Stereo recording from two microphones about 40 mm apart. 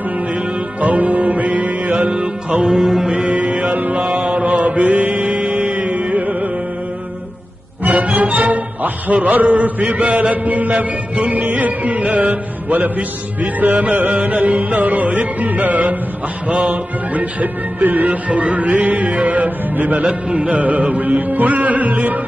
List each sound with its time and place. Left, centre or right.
0.7 s music: right
2.6 s music: centre
3.1 s chant: right
7.8 s music: right
20.0 s music: right